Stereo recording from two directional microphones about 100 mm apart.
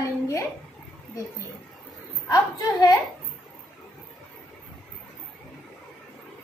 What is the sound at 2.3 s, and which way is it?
Speech, 40° left (ahead or behind).